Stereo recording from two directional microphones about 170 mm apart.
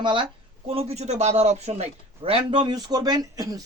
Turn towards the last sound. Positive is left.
turn(degrees=-20)  # may be behind; listen again after turning